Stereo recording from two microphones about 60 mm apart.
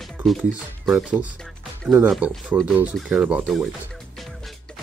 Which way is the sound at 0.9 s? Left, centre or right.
Centre.